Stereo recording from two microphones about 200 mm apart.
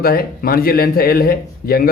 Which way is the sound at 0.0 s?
50° left (ahead or behind).